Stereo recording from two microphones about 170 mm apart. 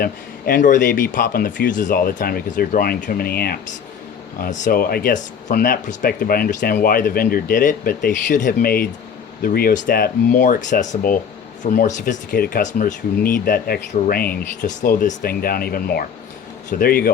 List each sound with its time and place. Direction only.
0.0 s a man's voice: 60° left (ahead or behind)
4.4 s a man's voice: 50° left (ahead or behind)